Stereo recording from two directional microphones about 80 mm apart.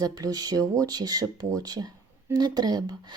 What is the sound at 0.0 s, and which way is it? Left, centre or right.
Speech, right.